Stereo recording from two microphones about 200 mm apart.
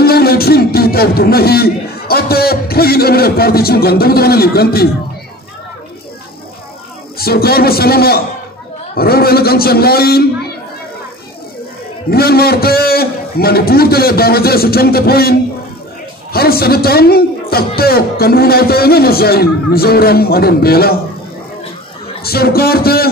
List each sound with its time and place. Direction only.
0.0 s speech: 50° left (ahead or behind)
7.2 s a man's voice: 50° left (ahead or behind)
12.1 s a man's voice: 50° left (ahead or behind)
16.3 s a man's voice: 50° left (ahead or behind)
22.2 s a man's voice: 50° left (ahead or behind)